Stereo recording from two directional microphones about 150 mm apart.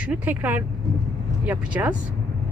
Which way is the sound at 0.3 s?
10° right (ahead or behind).